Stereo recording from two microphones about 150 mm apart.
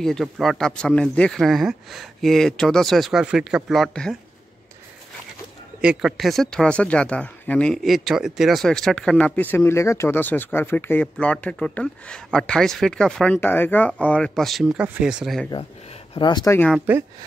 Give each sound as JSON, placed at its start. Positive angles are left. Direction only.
{"t": 0.0, "sound": "speech", "side_deg": 0}
{"t": 5.8, "sound": "speech", "side_deg": -5}
{"t": 16.2, "sound": "speech", "side_deg": 30}
{"t": 16.7, "sound": "speech", "side_deg": -10}